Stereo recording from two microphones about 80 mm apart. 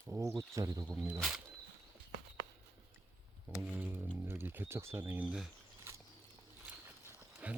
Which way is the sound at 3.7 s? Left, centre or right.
Right.